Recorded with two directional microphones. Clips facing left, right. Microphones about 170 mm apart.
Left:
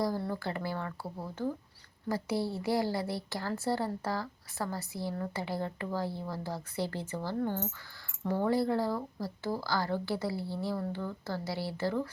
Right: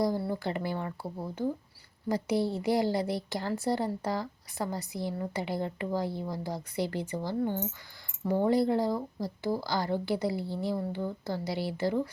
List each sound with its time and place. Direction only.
0.0 s a woman's voice: 15° right (ahead or behind)